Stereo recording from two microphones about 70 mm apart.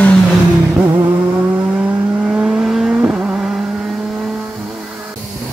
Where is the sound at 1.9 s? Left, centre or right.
Right.